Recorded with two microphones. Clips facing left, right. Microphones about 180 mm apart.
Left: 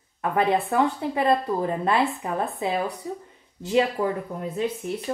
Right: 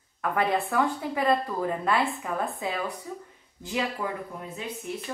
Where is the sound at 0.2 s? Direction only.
25° left (ahead or behind).